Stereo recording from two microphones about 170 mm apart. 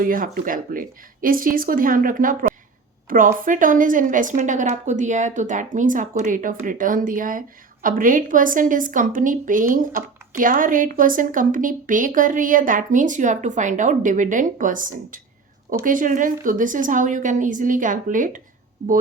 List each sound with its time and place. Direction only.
0.0 s a woman's voice: 55° right (ahead or behind)